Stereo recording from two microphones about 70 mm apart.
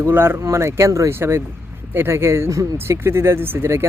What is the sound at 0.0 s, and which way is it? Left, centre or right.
Speech, right.